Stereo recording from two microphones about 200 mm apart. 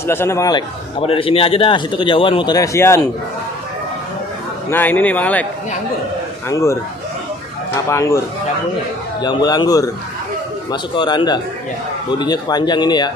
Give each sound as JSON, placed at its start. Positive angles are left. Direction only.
{"t": 0.0, "sound": "a man's voice", "side_deg": 10}
{"t": 4.6, "sound": "a man's voice", "side_deg": 10}
{"t": 6.5, "sound": "a man's voice", "side_deg": 15}
{"t": 7.9, "sound": "a man's voice", "side_deg": 15}
{"t": 9.2, "sound": "a man's voice", "side_deg": 20}